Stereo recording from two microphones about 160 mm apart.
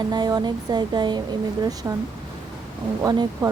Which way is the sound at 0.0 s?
25° right (ahead or behind).